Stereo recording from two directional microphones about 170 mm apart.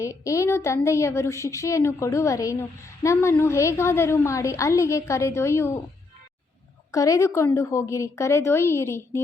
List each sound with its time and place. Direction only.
0.0 s a woman's voice: 20° left (ahead or behind)
6.9 s a woman's voice: 20° left (ahead or behind)